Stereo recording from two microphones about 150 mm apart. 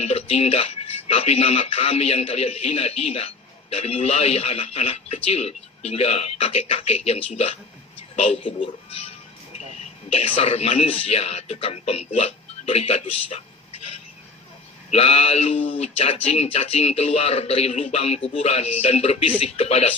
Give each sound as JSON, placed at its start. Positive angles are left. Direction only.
{"t": 0.0, "sound": "speech", "side_deg": 40}